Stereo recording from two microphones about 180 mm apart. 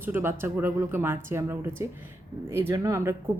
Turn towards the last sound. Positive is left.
turn(degrees=-15)  # may be behind; listen again after turning